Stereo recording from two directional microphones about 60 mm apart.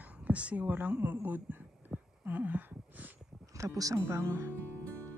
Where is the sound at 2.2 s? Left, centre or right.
Right.